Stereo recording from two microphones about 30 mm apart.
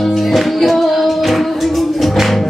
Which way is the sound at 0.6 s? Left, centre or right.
Centre.